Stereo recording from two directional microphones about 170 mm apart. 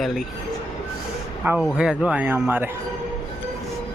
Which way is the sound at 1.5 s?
5° right (ahead or behind).